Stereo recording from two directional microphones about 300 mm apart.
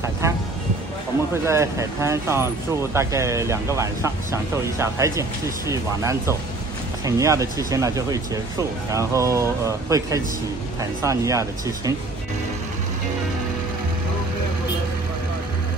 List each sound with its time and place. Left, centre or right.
1.3 s speech: centre